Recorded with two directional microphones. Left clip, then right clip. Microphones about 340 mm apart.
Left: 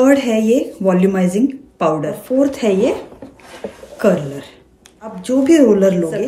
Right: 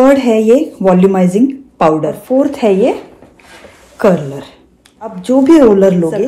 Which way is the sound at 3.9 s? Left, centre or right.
Centre.